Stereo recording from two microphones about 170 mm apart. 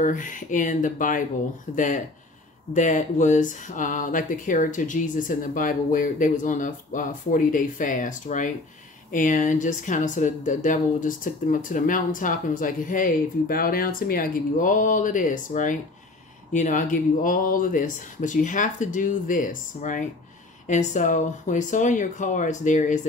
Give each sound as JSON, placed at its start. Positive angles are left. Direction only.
{"t": 0.0, "sound": "speech", "side_deg": 50}